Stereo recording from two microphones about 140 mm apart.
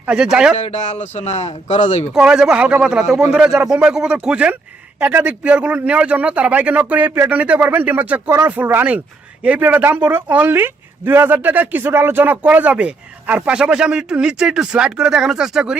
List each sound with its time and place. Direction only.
0.0 s speech: 5° right (ahead or behind)
0.5 s speech: 55° left (ahead or behind)
2.1 s speech: 5° right (ahead or behind)